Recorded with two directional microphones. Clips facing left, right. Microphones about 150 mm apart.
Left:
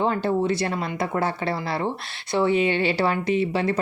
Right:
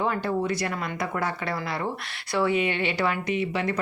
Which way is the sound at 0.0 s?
30° left (ahead or behind).